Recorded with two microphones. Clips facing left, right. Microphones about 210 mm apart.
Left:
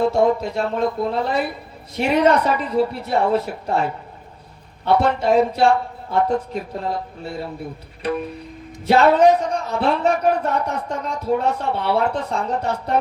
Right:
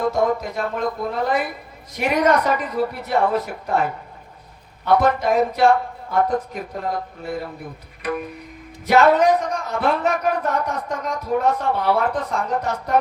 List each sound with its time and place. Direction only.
0.0 s speech: 30° left (ahead or behind)
8.9 s speech: 30° left (ahead or behind)